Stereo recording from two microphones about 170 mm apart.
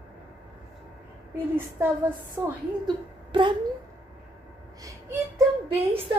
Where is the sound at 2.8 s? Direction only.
25° right (ahead or behind).